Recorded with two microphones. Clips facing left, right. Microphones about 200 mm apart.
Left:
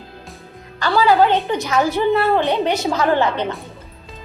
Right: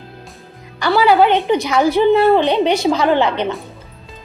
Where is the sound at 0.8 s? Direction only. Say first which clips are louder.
Right 2 dB; 15° right (ahead or behind).